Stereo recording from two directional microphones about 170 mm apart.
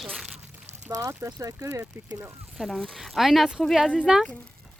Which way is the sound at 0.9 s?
20° right (ahead or behind).